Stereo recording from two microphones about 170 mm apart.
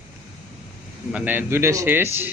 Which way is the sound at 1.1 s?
10° right (ahead or behind).